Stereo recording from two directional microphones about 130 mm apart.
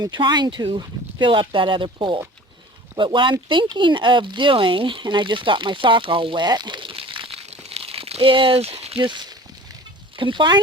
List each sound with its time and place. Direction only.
0.0 s speech: 35° right (ahead or behind)